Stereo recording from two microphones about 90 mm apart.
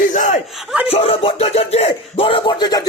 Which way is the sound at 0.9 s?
90° left.